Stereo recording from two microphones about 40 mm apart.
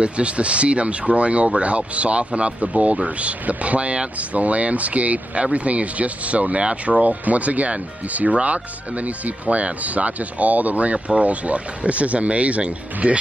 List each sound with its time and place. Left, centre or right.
0.0 s speech: right